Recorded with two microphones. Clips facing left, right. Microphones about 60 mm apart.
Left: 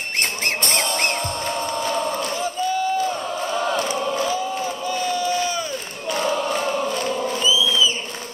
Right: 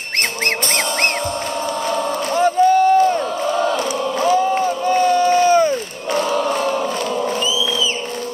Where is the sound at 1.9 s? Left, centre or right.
Right.